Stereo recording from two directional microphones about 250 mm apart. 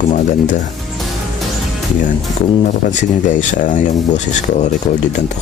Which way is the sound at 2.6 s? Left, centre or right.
Left.